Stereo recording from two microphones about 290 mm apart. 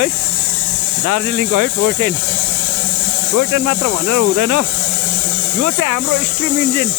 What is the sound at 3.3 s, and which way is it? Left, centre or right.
Speech, right.